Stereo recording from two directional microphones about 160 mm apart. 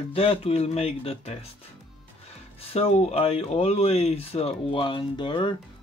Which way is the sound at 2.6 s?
40° left (ahead or behind).